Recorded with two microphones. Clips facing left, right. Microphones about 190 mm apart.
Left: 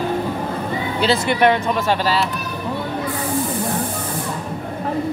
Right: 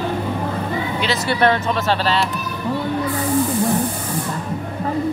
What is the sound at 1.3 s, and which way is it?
Speech, 15° left (ahead or behind).